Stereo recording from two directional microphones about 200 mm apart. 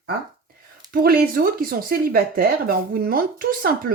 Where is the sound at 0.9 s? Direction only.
50° right (ahead or behind).